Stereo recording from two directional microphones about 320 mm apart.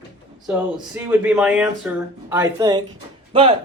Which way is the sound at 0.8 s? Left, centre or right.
Centre.